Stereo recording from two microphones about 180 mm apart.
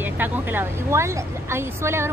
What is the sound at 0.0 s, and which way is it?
Speech, 10° right (ahead or behind).